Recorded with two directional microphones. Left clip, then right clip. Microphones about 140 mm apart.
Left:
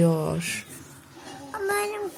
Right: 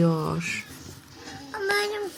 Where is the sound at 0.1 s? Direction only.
5° right (ahead or behind).